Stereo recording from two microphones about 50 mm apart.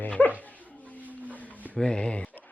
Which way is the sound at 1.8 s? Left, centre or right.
Centre.